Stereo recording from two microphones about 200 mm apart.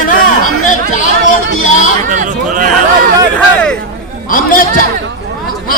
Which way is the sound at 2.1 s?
40° right (ahead or behind).